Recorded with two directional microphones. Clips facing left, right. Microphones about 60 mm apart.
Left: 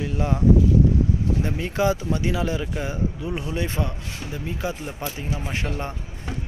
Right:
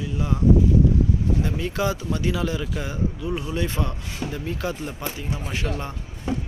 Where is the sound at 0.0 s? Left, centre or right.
Left.